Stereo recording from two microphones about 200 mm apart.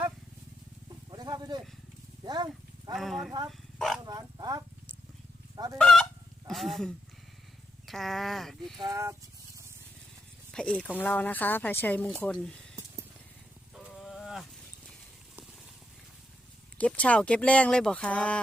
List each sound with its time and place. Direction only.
0.9 s a sound: 20° right (ahead or behind)
2.2 s wild animals: 20° right (ahead or behind)
2.9 s speech: centre (ahead or behind)
3.8 s dog: centre (ahead or behind)
4.0 s dog: 20° right (ahead or behind)
5.7 s goose: 5° left (ahead or behind)
6.5 s speech: centre (ahead or behind)
8.8 s speech: 15° right (ahead or behind)
10.5 s speech: 5° left (ahead or behind)
13.7 s a sound: centre (ahead or behind)
16.7 s speech: 5° left (ahead or behind)